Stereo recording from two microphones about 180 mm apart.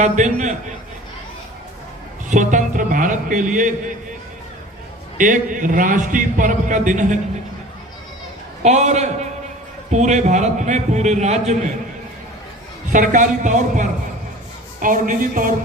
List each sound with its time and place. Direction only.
0.0 s a man's voice: 45° right (ahead or behind)
2.3 s a man's voice: 45° right (ahead or behind)
5.1 s a man's voice: 45° right (ahead or behind)
8.6 s a man's voice: 40° right (ahead or behind)
12.9 s a man's voice: 45° right (ahead or behind)